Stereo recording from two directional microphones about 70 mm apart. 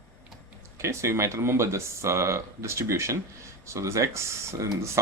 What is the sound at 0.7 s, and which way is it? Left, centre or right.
Speech, right.